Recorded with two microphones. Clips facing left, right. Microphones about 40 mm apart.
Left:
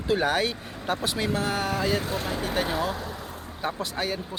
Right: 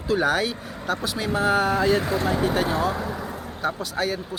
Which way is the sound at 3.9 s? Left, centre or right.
Centre.